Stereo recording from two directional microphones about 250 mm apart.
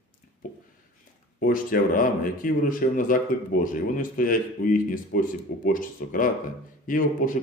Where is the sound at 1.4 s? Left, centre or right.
Left.